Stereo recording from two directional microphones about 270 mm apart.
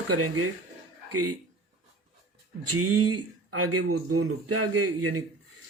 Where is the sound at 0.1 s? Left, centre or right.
Right.